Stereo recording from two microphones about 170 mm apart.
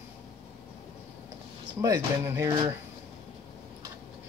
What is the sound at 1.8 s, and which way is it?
Speech, 15° right (ahead or behind).